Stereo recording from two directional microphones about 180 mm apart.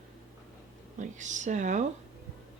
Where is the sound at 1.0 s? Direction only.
45° right (ahead or behind).